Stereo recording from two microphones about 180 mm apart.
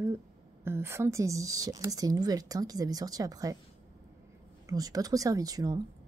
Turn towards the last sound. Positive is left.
turn(degrees=-20)  # may be behind; listen again after turning